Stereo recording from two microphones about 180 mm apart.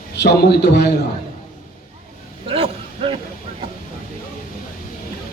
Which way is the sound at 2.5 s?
30° right (ahead or behind).